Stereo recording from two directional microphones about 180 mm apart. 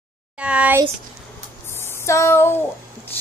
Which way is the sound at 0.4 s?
5° right (ahead or behind).